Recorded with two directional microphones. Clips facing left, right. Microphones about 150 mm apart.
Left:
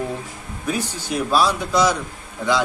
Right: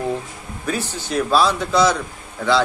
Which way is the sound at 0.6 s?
10° left (ahead or behind).